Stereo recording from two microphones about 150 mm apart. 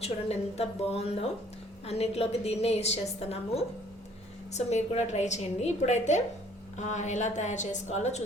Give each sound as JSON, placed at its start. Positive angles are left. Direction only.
{"t": 0.0, "sound": "a woman's voice", "side_deg": 45}